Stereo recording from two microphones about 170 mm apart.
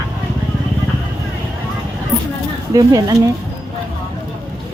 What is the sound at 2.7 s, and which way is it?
Speech, 20° right (ahead or behind).